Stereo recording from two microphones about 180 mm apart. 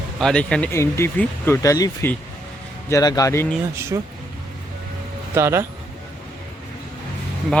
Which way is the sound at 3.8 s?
15° right (ahead or behind).